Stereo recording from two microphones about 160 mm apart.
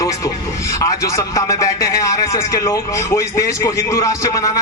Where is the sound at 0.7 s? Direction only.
20° left (ahead or behind).